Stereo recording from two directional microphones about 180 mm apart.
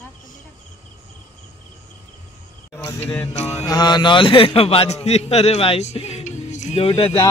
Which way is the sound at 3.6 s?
25° left (ahead or behind).